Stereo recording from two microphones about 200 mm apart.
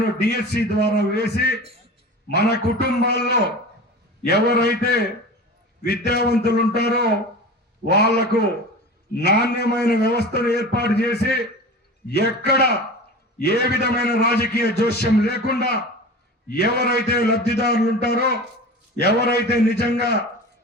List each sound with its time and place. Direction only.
0.2 s a man's voice: 55° left (ahead or behind)